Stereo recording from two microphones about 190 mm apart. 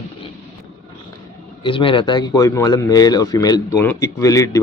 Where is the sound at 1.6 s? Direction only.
25° left (ahead or behind).